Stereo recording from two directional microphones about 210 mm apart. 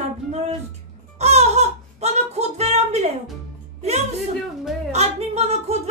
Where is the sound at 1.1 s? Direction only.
30° right (ahead or behind).